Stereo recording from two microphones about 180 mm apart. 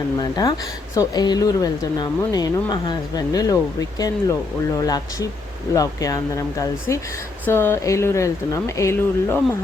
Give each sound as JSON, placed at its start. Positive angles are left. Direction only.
{"t": 0.2, "sound": "speech", "side_deg": 20}